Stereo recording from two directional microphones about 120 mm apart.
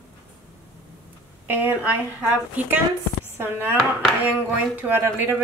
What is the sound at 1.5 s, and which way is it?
Speech, 15° right (ahead or behind).